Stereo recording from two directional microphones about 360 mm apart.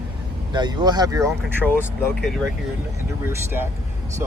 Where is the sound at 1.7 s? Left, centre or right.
Centre.